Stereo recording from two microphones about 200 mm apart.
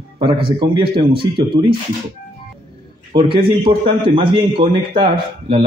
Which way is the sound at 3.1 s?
25° right (ahead or behind).